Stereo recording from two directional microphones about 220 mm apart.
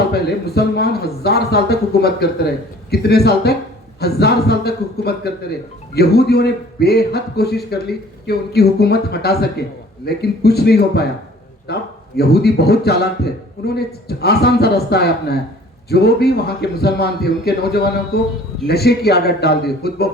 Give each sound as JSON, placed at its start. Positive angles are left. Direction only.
{"t": 0.1, "sound": "speech", "side_deg": 45}